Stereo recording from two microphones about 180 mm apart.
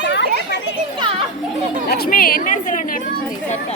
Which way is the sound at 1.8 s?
60° left (ahead or behind).